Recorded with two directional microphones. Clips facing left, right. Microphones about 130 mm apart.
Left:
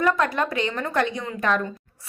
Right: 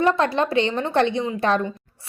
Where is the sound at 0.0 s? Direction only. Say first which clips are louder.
Right 3 dB; 30° right (ahead or behind).